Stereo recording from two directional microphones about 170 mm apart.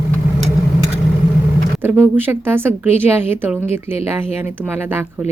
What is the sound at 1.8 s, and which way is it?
Speech, 10° right (ahead or behind).